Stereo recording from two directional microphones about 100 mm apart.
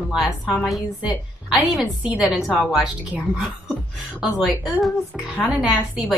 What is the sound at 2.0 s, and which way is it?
Speech, 5° right (ahead or behind).